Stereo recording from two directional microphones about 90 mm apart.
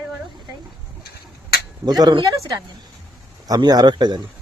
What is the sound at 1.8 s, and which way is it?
Speech, 50° right (ahead or behind).